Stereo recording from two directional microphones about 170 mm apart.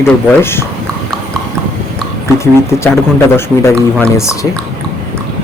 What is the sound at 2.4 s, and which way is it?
Speech, 15° left (ahead or behind).